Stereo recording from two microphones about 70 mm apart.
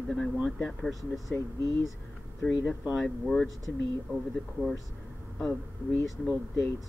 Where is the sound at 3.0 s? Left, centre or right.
Centre.